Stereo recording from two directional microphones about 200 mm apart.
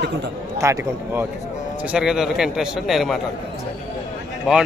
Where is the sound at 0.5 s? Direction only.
15° right (ahead or behind).